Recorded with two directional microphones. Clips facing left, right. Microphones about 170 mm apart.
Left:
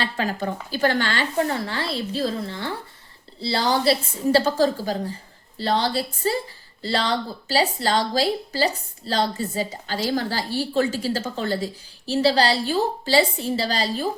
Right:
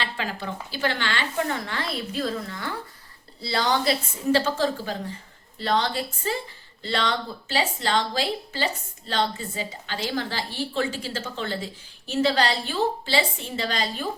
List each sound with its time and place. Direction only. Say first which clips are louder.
0.0 s a woman's voice: left 5 dB; 45° left (ahead or behind)